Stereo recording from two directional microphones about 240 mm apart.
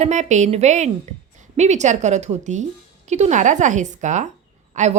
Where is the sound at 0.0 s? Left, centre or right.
Right.